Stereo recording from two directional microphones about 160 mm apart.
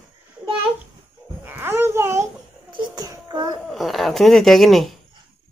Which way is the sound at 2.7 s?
25° right (ahead or behind).